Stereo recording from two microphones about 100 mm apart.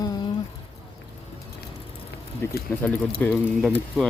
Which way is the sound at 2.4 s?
25° left (ahead or behind).